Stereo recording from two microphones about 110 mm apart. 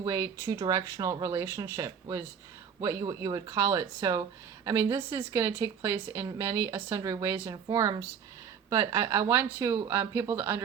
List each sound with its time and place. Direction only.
0.0 s a woman's voice: 30° right (ahead or behind)
3.4 s a woman's voice: 30° right (ahead or behind)